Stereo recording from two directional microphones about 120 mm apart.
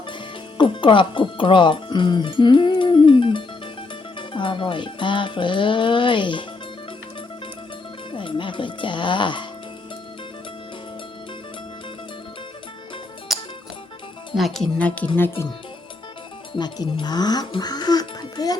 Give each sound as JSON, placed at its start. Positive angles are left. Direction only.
{"t": 0.5, "sound": "speech", "side_deg": 45}
{"t": 4.2, "sound": "music", "side_deg": 45}
{"t": 8.1, "sound": "speech", "side_deg": 45}
{"t": 13.3, "sound": "music", "side_deg": 0}
{"t": 14.3, "sound": "speech", "side_deg": 0}
{"t": 16.6, "sound": "speech", "side_deg": 35}